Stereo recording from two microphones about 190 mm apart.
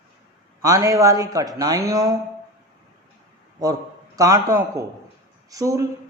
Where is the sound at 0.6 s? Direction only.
15° right (ahead or behind).